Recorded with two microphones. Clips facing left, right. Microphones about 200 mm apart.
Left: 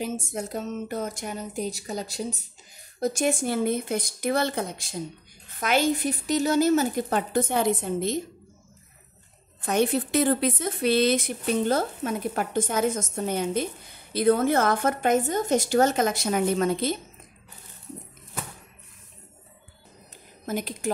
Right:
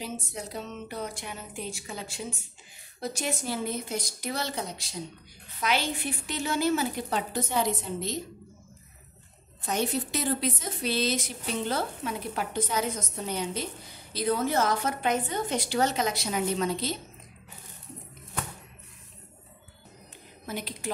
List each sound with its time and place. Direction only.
0.0 s a woman's voice: 50° left (ahead or behind)
9.6 s a woman's voice: 55° left (ahead or behind)
20.4 s a woman's voice: 45° left (ahead or behind)